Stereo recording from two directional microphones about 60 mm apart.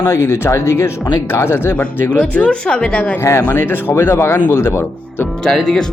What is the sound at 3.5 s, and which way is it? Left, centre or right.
Speech, left.